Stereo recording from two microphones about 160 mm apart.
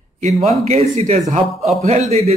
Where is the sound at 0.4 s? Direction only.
40° right (ahead or behind).